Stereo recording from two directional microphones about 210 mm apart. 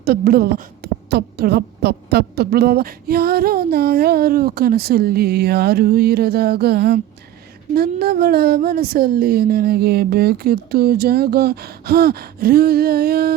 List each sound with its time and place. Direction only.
0.0 s a woman's voice: 45° right (ahead or behind)